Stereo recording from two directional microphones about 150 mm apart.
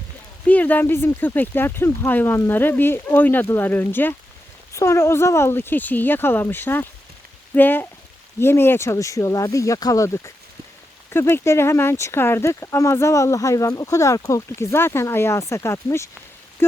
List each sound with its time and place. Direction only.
0.4 s speech: 10° left (ahead or behind)